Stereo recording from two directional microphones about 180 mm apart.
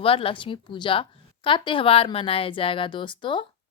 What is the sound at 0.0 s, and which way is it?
Speech, 30° left (ahead or behind).